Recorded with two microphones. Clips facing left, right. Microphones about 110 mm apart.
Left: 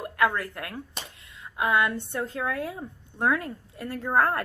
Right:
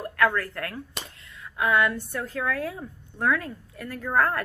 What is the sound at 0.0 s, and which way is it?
A woman's voice, 15° left (ahead or behind).